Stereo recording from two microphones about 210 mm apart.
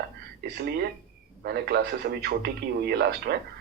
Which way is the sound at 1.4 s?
50° right (ahead or behind).